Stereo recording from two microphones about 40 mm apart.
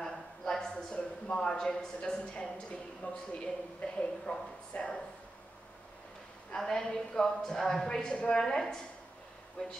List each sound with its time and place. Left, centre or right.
0.0 s a sound: centre
1.3 s a woman's voice: centre; by 4.9 s left
6.5 s a woman's voice: centre